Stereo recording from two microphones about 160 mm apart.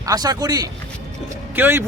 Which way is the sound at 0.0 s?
25° right (ahead or behind).